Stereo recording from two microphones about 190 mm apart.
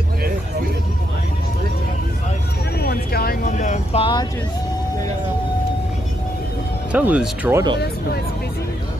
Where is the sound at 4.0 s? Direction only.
20° left (ahead or behind).